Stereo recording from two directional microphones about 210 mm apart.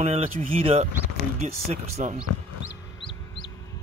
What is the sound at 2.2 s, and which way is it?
Chicken, 15° left (ahead or behind).